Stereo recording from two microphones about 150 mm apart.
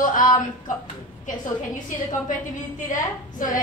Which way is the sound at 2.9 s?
60° left (ahead or behind).